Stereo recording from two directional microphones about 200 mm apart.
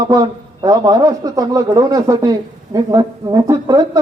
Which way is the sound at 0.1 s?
20° right (ahead or behind).